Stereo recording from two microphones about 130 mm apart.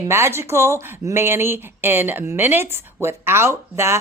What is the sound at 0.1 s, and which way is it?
Speech, 20° right (ahead or behind).